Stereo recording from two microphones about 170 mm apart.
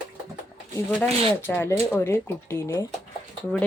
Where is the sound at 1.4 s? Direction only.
10° left (ahead or behind).